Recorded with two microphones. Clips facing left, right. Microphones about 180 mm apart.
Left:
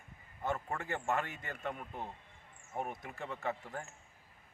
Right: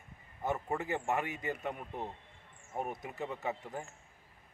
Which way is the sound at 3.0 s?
20° right (ahead or behind).